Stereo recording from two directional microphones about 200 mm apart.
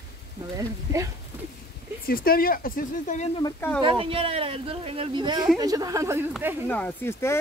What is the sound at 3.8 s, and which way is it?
Speech, 25° right (ahead or behind).